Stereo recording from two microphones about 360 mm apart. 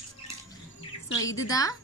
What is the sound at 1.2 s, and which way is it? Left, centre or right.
Speech, centre.